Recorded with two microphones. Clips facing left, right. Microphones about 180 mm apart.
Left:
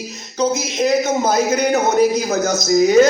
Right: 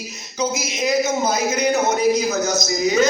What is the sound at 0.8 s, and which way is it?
A man's voice, 55° left (ahead or behind).